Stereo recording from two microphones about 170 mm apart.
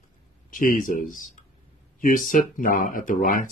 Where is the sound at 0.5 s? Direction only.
50° left (ahead or behind).